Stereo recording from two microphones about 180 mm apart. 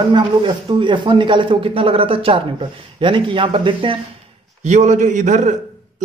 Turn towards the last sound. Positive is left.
turn(degrees=-40)  # may be behind; listen again after turning